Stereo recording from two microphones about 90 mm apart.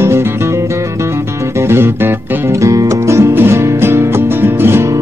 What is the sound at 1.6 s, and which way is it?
Music, 25° right (ahead or behind).